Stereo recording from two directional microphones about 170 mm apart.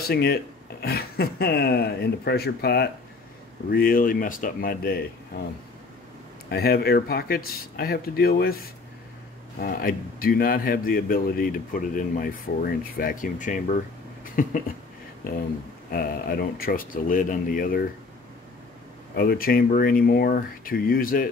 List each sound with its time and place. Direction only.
0.1 s speech: 70° left (ahead or behind)
3.7 s speech: 60° left (ahead or behind)
6.5 s speech: 65° left (ahead or behind)
9.6 s speech: 55° left (ahead or behind)
14.2 s a sound: 55° left (ahead or behind)
15.9 s speech: 60° left (ahead or behind)
19.1 s speech: 60° left (ahead or behind)